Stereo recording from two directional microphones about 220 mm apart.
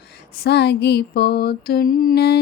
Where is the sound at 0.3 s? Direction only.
50° left (ahead or behind).